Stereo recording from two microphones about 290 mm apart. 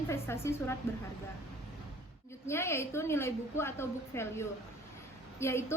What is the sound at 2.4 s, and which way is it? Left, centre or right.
A woman's voice, centre.